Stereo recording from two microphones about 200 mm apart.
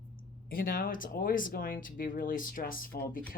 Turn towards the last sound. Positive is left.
turn(degrees=50)  # may be behind; listen again after turning